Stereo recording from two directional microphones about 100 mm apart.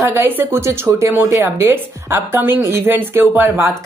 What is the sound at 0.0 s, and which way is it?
A woman's voice, 25° right (ahead or behind).